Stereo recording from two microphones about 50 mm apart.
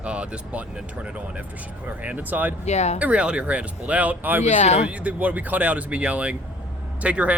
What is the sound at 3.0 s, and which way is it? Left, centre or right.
Speech, right.